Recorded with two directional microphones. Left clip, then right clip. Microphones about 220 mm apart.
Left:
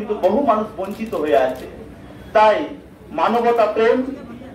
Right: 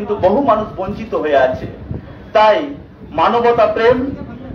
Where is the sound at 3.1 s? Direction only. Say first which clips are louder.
Right 4 dB; 45° right (ahead or behind).